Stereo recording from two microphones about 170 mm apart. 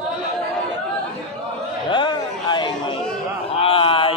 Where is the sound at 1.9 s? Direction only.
25° left (ahead or behind).